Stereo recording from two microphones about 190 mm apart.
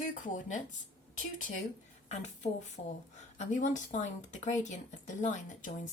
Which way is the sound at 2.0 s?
35° left (ahead or behind).